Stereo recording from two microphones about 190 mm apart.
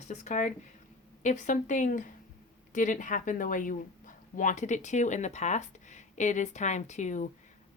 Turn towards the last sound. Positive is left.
turn(degrees=40)  # may be behind; listen again after turning